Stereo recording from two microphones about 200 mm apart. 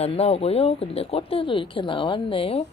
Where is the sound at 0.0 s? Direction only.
30° left (ahead or behind).